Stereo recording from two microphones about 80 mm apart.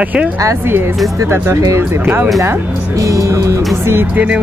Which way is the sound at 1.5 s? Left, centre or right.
Right.